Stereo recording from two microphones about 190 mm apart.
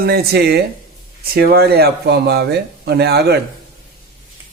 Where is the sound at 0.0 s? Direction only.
55° right (ahead or behind).